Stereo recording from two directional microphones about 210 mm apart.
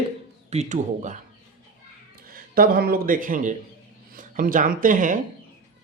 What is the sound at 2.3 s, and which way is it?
A man's voice, 45° right (ahead or behind).